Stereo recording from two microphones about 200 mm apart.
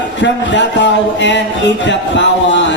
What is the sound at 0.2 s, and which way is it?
Speech, 65° left (ahead or behind).